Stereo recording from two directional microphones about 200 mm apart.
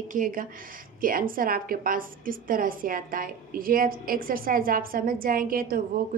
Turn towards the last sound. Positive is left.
turn(degrees=-45)  # may be behind; listen again after turning